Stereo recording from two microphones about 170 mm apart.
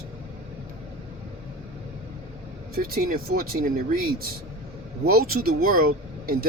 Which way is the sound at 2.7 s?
60° right (ahead or behind).